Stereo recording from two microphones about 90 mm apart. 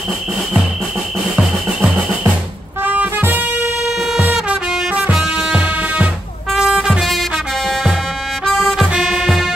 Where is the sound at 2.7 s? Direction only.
20° right (ahead or behind).